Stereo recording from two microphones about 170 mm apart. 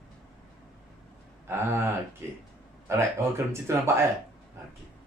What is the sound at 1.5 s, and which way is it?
Speech, 15° right (ahead or behind).